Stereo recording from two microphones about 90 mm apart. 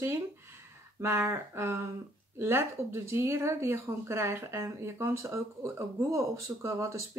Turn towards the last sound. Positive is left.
turn(degrees=-35)  # may be behind; listen again after turning